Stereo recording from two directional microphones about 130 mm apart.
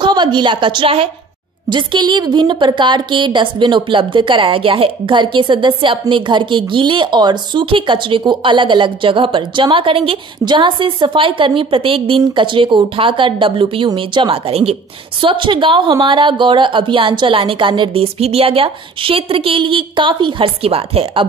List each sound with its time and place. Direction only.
0.0 s a woman's voice: 35° right (ahead or behind)